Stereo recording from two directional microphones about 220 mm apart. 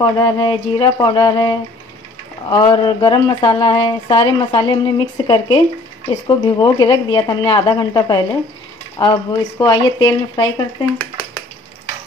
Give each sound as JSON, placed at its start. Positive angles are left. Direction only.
{"t": 0.0, "sound": "speech", "side_deg": 15}